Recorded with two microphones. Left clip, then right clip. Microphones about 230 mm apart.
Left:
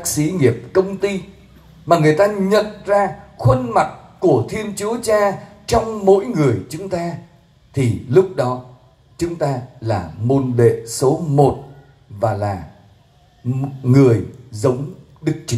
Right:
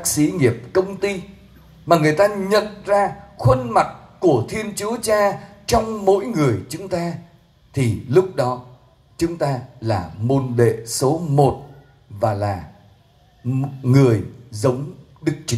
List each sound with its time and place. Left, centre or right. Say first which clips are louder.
0.0 s a man's voice: left 1 dB; right